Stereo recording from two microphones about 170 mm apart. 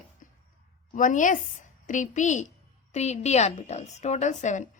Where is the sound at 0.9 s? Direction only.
50° left (ahead or behind).